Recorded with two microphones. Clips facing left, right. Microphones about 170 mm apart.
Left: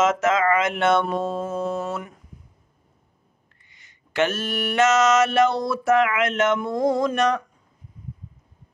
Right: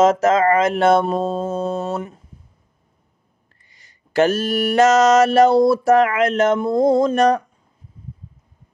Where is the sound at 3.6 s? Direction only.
35° right (ahead or behind).